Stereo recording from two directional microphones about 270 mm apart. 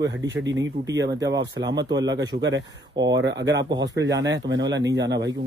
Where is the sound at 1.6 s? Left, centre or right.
Right.